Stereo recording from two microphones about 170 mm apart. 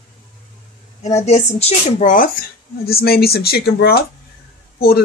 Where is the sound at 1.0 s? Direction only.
40° left (ahead or behind).